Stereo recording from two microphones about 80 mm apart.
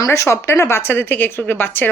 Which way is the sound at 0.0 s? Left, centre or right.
Left.